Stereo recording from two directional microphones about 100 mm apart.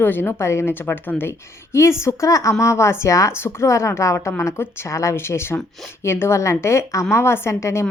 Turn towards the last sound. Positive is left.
turn(degrees=30)  # may be behind; listen again after turning